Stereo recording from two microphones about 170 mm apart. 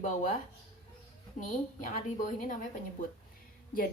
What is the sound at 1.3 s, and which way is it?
A woman's voice, 50° left (ahead or behind).